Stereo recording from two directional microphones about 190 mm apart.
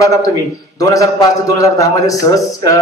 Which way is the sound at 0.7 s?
20° left (ahead or behind).